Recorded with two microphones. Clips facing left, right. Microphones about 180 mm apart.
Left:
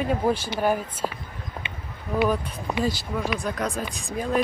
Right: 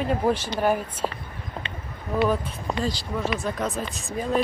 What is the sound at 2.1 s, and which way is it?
Speech, centre (ahead or behind).